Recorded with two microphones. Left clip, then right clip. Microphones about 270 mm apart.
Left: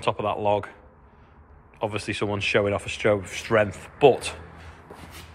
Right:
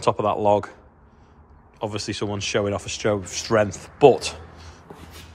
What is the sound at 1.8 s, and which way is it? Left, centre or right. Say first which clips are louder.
Speech: even; centre.